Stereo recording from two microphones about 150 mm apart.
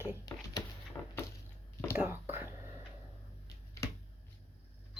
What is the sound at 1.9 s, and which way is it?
Whispering, 15° right (ahead or behind).